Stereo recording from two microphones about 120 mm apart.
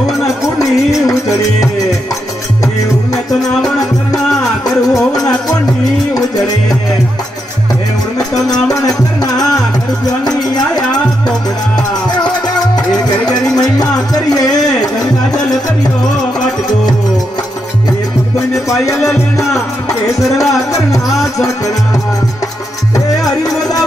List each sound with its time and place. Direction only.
3.3 s music: centre (ahead or behind)
4.9 s music: 30° left (ahead or behind)
8.6 s music: 30° left (ahead or behind)
13.6 s music: 30° left (ahead or behind)
18.5 s music: 25° left (ahead or behind)
22.9 s music: 30° left (ahead or behind)